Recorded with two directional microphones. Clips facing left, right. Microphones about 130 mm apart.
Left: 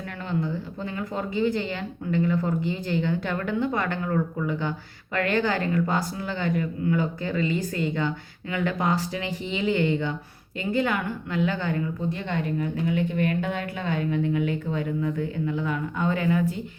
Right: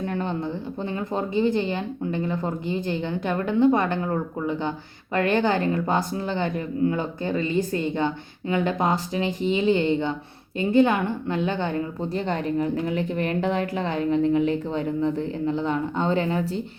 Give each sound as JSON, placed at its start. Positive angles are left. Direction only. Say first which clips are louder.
{"t": 0.3, "sound": "speech", "louder": "even", "side_deg": -20}
{"t": 12.0, "sound": "a woman's voice", "louder": "right 3 dB", "side_deg": -35}